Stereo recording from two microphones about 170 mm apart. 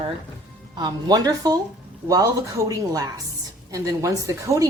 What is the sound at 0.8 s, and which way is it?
A woman's voice, 25° right (ahead or behind).